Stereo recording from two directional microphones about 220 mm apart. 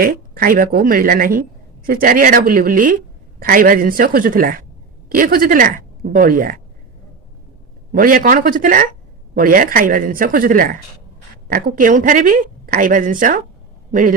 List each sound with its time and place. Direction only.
0.0 s a woman's voice: 40° right (ahead or behind)
7.9 s a woman's voice: 40° right (ahead or behind)